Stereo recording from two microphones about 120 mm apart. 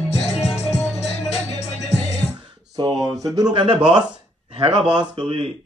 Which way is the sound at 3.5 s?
45° right (ahead or behind).